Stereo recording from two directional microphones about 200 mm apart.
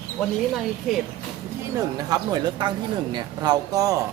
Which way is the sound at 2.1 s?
20° right (ahead or behind).